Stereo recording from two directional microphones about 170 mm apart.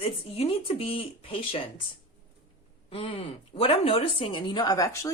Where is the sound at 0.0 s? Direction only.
35° left (ahead or behind).